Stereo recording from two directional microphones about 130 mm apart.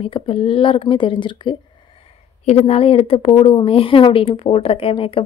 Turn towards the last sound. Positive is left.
turn(degrees=45)  # may be behind; listen again after turning